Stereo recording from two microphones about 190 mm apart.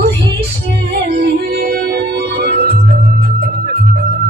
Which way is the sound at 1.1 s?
50° right (ahead or behind).